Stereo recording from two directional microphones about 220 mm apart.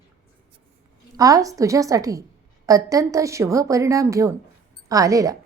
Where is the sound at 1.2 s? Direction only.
15° right (ahead or behind).